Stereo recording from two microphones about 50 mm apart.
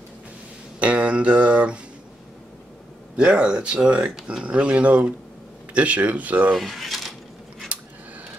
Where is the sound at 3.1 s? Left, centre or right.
Centre.